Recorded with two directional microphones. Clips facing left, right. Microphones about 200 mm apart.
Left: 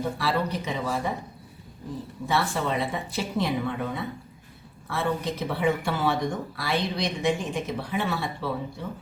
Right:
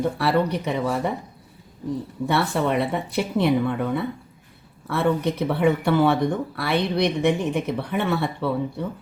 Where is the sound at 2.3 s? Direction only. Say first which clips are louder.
Right 4 dB; 60° right (ahead or behind).